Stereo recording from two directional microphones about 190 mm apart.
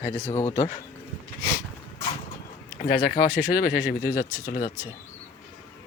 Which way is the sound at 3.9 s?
15° left (ahead or behind).